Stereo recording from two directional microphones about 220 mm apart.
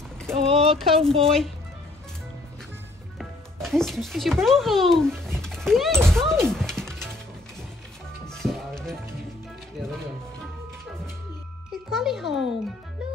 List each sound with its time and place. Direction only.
0.5 s speech: 25° right (ahead or behind)
0.7 s speech: centre (ahead or behind)
3.2 s a child's voice: centre (ahead or behind)
5.4 s music: centre (ahead or behind)
6.0 s speech: centre (ahead or behind)
6.5 s music: centre (ahead or behind)
8.3 s music: centre (ahead or behind)
11.9 s speech: centre (ahead or behind)